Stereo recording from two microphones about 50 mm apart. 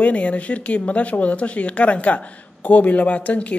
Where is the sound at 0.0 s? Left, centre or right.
Left.